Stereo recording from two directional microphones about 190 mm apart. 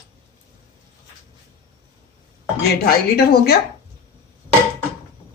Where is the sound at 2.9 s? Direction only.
55° left (ahead or behind).